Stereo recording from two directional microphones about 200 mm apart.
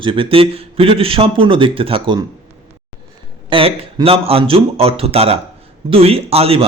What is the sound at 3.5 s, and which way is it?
A man's voice, 25° right (ahead or behind).